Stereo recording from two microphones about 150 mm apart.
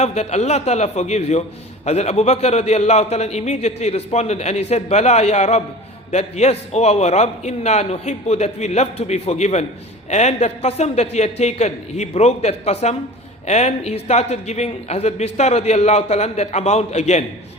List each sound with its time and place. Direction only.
0.0 s a man's voice: 45° left (ahead or behind)